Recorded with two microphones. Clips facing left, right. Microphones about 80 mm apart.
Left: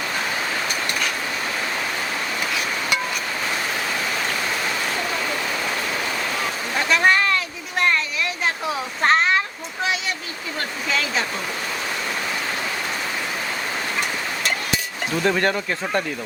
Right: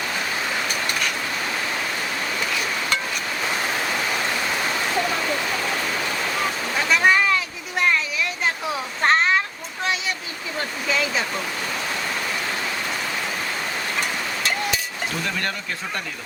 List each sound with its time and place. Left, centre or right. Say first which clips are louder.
6.8 s a sound: even; centre
10.8 s waterfall: even; centre
15.3 s speech: left 10 dB; left